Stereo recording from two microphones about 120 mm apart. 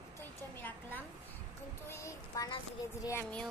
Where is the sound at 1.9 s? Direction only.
25° left (ahead or behind).